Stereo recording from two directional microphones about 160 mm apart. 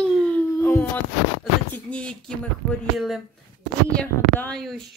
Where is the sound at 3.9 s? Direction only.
10° left (ahead or behind).